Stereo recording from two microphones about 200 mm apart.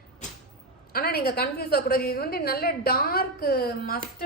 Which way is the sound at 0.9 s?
50° left (ahead or behind).